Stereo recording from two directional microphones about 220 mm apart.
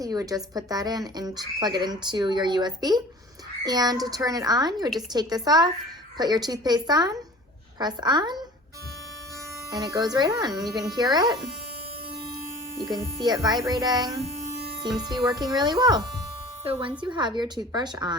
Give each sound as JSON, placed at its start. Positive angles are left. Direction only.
{"t": 0.0, "sound": "a woman's voice", "side_deg": -15}
{"t": 9.6, "sound": "a woman's voice", "side_deg": -15}
{"t": 13.0, "sound": "a woman's voice", "side_deg": -20}